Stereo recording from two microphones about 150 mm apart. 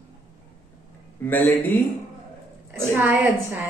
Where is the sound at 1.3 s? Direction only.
15° left (ahead or behind).